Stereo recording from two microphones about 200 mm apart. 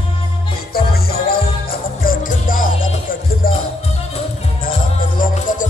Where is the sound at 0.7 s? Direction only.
50° left (ahead or behind).